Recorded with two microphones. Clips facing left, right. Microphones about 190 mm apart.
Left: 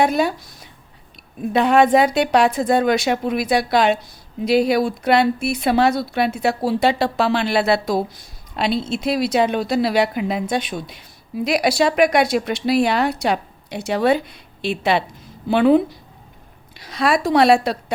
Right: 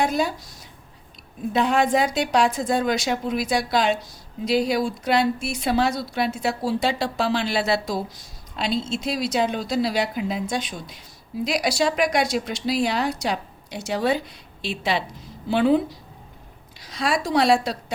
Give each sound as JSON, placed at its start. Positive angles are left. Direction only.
{"t": 0.0, "sound": "a woman's voice", "side_deg": 65}
{"t": 1.5, "sound": "a woman's voice", "side_deg": 60}